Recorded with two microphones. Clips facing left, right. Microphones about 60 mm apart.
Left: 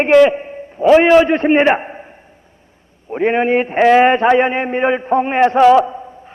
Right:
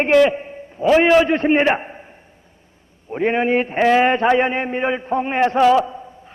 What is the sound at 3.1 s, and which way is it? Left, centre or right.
A man's voice, centre.